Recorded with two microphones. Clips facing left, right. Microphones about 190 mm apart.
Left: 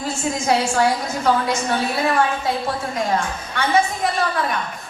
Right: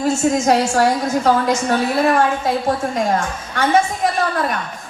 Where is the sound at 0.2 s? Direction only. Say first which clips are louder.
Right 1 dB; 45° right (ahead or behind).